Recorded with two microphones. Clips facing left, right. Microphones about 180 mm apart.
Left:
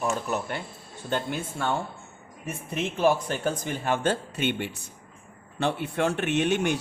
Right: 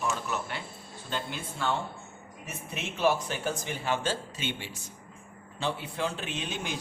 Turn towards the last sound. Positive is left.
turn(degrees=70)  # may be behind; listen again after turning